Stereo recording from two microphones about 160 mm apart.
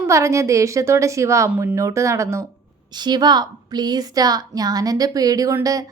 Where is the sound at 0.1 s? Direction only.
20° right (ahead or behind).